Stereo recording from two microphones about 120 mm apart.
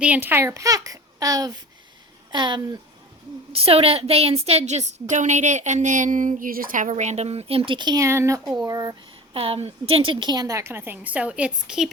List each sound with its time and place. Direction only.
0.0 s a woman's voice: 15° right (ahead or behind); by 2.6 s 40° right (ahead or behind)
3.5 s a woman's voice: 55° right (ahead or behind); by 8.0 s 40° right (ahead or behind)
8.0 s a woman's voice: 25° right (ahead or behind)
9.3 s a woman's voice: 55° right (ahead or behind); by 11.9 s 10° right (ahead or behind)